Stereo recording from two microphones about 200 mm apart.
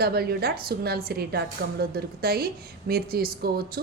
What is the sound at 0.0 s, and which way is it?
A woman's voice, 50° right (ahead or behind).